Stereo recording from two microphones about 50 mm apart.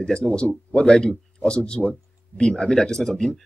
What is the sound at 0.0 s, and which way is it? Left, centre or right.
Speech, centre.